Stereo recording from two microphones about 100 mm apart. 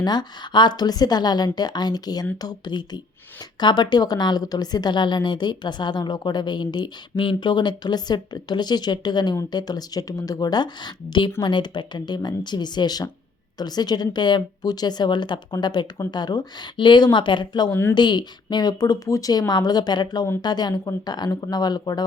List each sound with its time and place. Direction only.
0.0 s a woman's voice: 45° left (ahead or behind)